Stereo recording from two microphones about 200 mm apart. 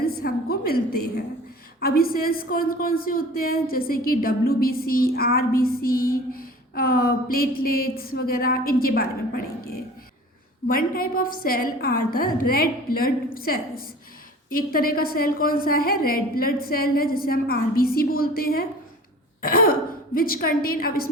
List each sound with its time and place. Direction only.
0.2 s a man's voice: 50° left (ahead or behind)